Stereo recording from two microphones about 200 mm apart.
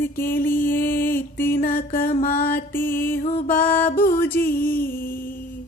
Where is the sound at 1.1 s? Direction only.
10° left (ahead or behind).